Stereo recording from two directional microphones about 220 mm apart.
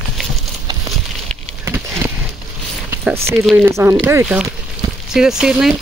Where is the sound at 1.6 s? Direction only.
10° right (ahead or behind).